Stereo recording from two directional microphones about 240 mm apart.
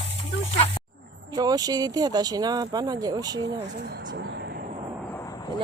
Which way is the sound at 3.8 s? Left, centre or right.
Right.